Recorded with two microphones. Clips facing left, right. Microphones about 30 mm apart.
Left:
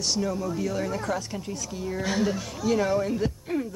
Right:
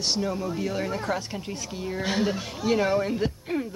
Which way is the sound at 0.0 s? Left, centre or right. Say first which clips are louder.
Even; right.